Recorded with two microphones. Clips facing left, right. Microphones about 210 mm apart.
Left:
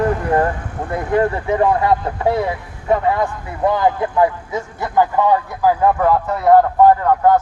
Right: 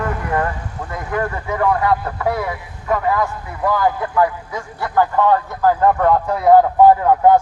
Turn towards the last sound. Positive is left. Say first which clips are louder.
# right 1 dB
turn(degrees=-10)  # may be behind; listen again after turning